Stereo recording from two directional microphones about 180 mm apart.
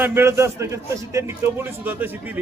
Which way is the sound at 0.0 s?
15° right (ahead or behind).